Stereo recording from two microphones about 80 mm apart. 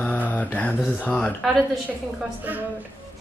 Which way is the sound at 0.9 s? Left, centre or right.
Left.